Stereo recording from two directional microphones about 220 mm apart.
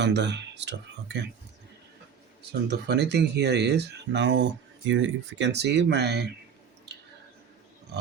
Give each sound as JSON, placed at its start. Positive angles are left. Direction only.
{"t": 0.0, "sound": "speech", "side_deg": -50}
{"t": 2.6, "sound": "speech", "side_deg": -50}